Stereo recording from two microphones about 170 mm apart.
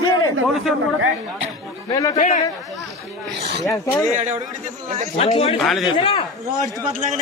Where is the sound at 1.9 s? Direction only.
20° left (ahead or behind).